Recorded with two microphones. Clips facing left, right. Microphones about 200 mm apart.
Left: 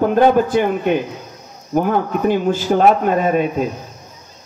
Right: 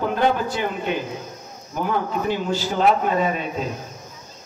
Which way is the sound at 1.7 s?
50° left (ahead or behind).